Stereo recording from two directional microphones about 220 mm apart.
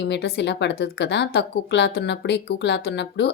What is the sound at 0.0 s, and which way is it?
A woman's voice, 50° left (ahead or behind).